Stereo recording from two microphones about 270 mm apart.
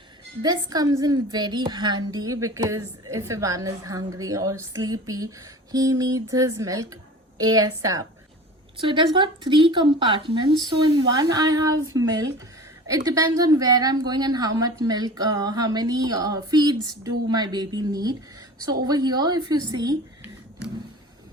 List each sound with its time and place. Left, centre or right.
0.4 s a woman's voice: centre